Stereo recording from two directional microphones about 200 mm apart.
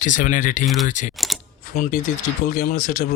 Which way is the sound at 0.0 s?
40° left (ahead or behind).